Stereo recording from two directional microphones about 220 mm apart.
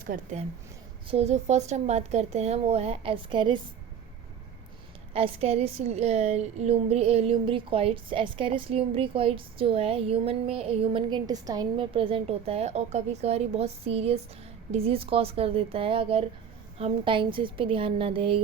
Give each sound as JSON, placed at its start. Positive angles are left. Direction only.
{"t": 0.0, "sound": "a woman's voice", "side_deg": -35}
{"t": 5.1, "sound": "a woman's voice", "side_deg": -25}